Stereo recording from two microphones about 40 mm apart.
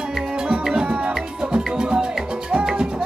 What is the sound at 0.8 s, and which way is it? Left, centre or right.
Music, right.